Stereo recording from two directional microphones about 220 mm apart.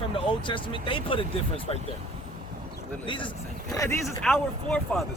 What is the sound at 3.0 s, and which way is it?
Speech, 20° left (ahead or behind).